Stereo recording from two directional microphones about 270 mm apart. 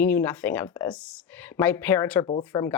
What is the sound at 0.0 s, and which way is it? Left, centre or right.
Speech, centre.